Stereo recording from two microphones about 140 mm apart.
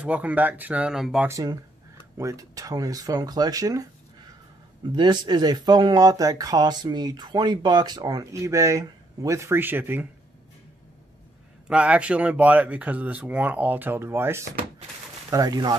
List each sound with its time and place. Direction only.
0.0 s speech: 10° right (ahead or behind)
1.2 s speech: 25° right (ahead or behind)
11.6 s speech: 10° right (ahead or behind); by 15.7 s 25° right (ahead or behind)